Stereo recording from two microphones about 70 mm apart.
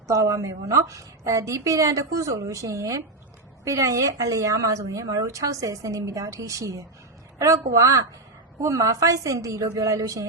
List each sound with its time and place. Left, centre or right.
0.1 s speech: right